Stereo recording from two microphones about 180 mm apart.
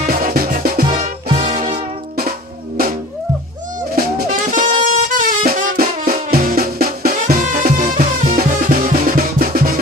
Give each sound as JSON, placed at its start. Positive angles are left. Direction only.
{"t": 0.0, "sound": "music", "side_deg": -50}
{"t": 1.4, "sound": "music", "side_deg": -40}
{"t": 3.9, "sound": "music", "side_deg": -45}